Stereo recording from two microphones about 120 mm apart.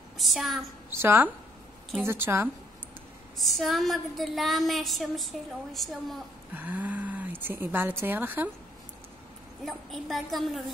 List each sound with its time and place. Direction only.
0.2 s a woman's voice: centre (ahead or behind)
0.9 s a woman's voice: 20° right (ahead or behind)
3.3 s a woman's voice: centre (ahead or behind)
6.5 s speech: 15° right (ahead or behind)
9.7 s a woman's voice: centre (ahead or behind)